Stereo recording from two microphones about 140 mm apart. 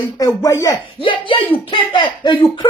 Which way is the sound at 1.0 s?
40° left (ahead or behind).